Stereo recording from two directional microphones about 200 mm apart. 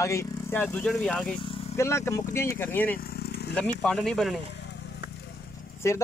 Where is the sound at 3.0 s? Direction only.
50° left (ahead or behind).